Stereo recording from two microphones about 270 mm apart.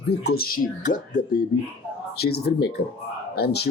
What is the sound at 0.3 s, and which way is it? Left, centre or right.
Speech, left.